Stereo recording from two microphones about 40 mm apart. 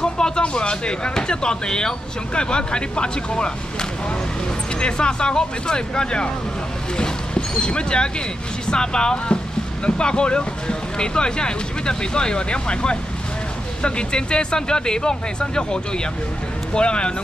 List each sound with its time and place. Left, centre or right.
0.0 s speech: centre
4.7 s speech: left
7.3 s speech: left